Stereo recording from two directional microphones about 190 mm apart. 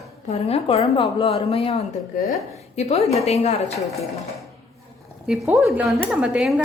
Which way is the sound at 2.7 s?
35° left (ahead or behind).